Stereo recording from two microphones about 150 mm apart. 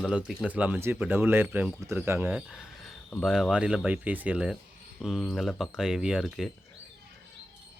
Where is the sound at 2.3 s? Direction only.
Centre (ahead or behind).